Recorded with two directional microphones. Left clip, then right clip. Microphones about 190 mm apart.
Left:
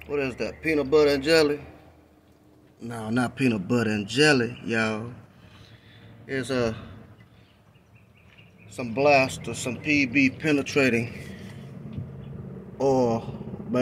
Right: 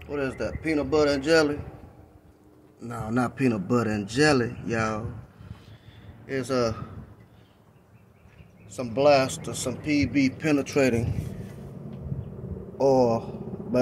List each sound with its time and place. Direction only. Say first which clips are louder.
0.0 s a man's voice: left 1 dB; 10° right (ahead or behind)
2.9 s a man's voice: even; centre (ahead or behind)
6.2 s a man's voice: even; 10° right (ahead or behind)
8.7 s a man's voice: even; 15° right (ahead or behind)
12.8 s a sound: right 2 dB; centre (ahead or behind)